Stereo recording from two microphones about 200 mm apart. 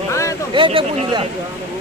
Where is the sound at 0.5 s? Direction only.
25° right (ahead or behind).